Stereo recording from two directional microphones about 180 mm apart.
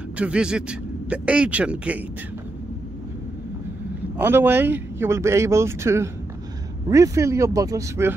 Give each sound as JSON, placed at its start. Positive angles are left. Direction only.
{"t": 0.2, "sound": "speech", "side_deg": -5}
{"t": 4.2, "sound": "speech", "side_deg": -10}